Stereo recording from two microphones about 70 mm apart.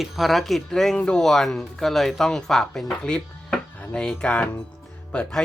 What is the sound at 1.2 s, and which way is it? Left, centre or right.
Speech, centre.